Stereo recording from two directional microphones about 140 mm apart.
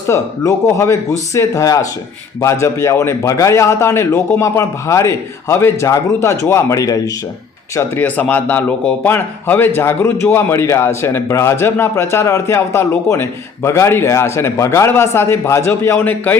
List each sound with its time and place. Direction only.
0.1 s a man's voice: 20° left (ahead or behind)
7.8 s a man's voice: 10° left (ahead or behind)